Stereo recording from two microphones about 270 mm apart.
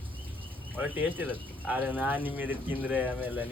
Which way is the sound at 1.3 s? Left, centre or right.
Centre.